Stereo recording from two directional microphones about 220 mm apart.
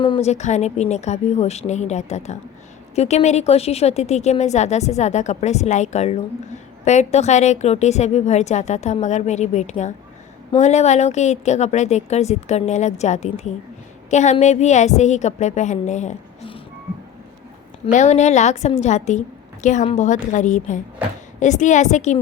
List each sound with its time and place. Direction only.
0.0 s a woman's voice: 25° left (ahead or behind)
17.9 s a woman's voice: 30° left (ahead or behind)